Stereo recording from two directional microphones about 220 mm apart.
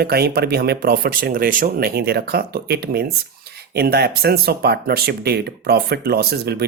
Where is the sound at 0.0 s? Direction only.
45° right (ahead or behind).